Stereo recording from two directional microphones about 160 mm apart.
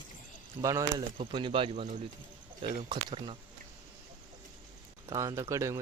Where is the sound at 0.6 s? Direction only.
20° right (ahead or behind).